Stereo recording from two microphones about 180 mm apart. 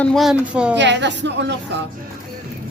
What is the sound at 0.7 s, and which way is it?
Speech, 75° right (ahead or behind).